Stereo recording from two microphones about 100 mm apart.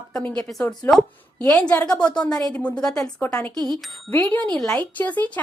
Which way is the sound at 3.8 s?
Centre (ahead or behind).